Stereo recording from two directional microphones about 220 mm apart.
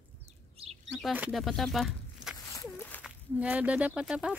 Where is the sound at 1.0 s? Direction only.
5° right (ahead or behind).